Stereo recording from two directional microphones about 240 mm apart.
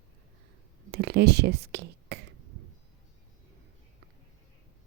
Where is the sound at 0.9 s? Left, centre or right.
Right.